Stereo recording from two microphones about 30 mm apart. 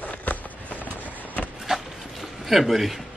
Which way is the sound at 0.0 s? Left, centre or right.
Left.